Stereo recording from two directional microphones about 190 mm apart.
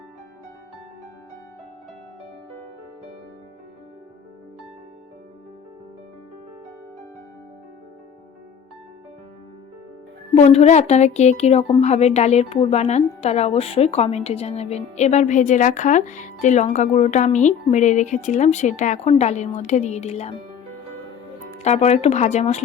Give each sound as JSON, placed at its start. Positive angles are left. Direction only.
{"t": 10.3, "sound": "a woman's voice", "side_deg": 35}
{"t": 21.6, "sound": "a woman's voice", "side_deg": 35}